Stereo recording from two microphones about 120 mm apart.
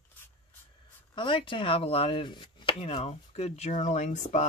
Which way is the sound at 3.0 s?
60° left (ahead or behind).